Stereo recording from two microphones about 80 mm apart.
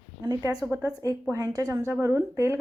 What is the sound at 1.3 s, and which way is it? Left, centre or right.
Speech, right.